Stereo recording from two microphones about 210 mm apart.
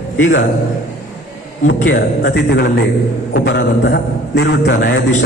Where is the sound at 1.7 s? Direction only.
55° left (ahead or behind).